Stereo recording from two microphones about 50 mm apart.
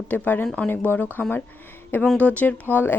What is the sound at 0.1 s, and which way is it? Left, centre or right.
Speech, left.